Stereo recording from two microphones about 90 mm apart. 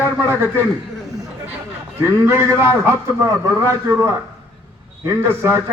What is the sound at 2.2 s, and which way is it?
A man's voice, 30° right (ahead or behind).